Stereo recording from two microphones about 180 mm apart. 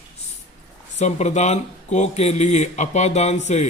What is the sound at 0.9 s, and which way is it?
Speech, 40° left (ahead or behind).